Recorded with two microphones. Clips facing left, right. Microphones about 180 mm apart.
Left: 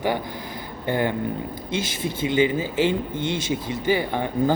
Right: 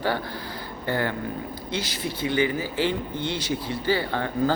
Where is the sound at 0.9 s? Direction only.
20° left (ahead or behind).